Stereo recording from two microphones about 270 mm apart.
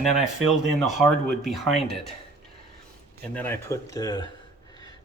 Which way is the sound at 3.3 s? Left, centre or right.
Centre.